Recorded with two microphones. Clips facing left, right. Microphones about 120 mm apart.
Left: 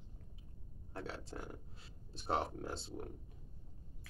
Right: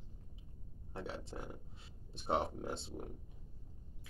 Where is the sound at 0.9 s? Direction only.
20° right (ahead or behind).